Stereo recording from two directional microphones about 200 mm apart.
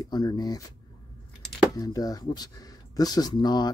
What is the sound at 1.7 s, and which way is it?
Speech, 20° left (ahead or behind).